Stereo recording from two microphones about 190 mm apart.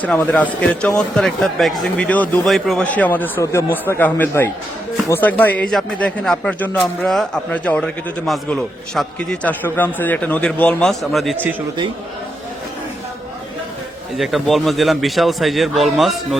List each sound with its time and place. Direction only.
0.0 s a man's voice: 5° left (ahead or behind)
14.2 s a man's voice: centre (ahead or behind)